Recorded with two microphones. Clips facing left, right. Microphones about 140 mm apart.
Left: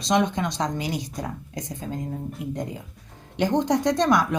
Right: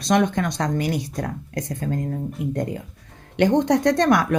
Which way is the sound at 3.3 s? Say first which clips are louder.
Right 4 dB; 60° right (ahead or behind).